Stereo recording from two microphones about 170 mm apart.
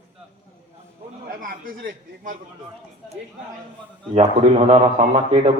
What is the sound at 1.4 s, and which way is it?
Speech, 55° right (ahead or behind).